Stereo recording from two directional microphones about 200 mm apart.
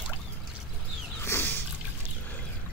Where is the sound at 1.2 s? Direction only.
10° left (ahead or behind).